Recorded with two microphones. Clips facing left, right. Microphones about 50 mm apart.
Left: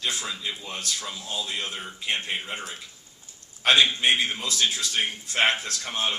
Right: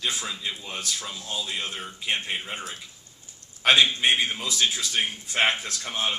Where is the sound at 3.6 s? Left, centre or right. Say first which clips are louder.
Even; centre.